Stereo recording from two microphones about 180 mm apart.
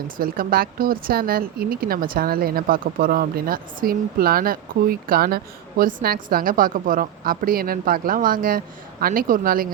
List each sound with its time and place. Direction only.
0.2 s speech: 55° right (ahead or behind)